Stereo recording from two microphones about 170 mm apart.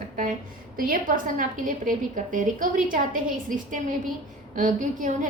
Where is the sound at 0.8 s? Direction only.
55° right (ahead or behind).